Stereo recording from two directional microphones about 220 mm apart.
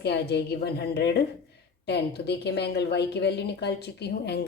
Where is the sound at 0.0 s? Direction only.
50° left (ahead or behind).